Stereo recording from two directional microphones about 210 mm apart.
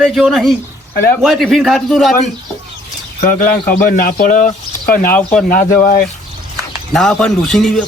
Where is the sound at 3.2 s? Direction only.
40° left (ahead or behind).